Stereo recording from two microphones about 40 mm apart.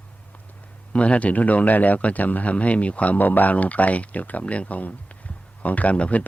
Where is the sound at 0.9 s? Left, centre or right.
Left.